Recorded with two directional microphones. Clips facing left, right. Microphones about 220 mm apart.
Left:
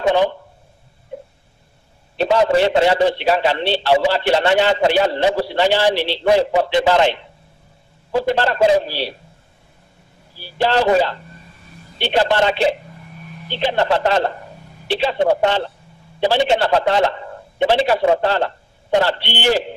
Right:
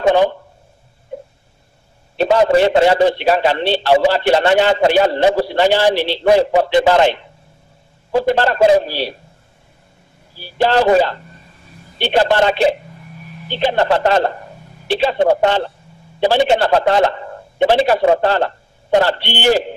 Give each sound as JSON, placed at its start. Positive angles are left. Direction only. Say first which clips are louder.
{"t": 0.0, "sound": "speech", "louder": "right 3 dB", "side_deg": -45}
{"t": 2.1, "sound": "a man's voice", "louder": "right 3 dB", "side_deg": -45}
{"t": 10.6, "sound": "a man's voice", "louder": "right 3 dB", "side_deg": -45}